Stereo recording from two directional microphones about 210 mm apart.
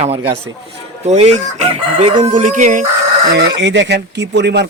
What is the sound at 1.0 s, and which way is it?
Chicken, 30° right (ahead or behind).